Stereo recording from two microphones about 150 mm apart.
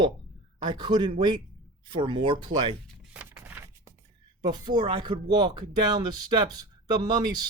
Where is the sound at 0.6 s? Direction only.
30° right (ahead or behind).